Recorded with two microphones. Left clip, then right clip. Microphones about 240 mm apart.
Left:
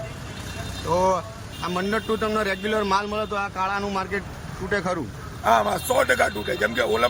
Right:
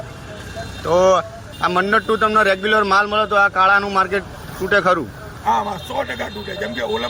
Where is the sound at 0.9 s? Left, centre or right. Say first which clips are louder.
Right 8 dB; centre.